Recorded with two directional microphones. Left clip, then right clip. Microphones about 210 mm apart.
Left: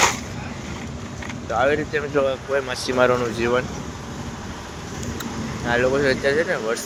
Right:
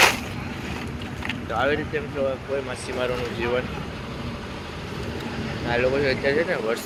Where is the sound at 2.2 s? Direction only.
35° left (ahead or behind).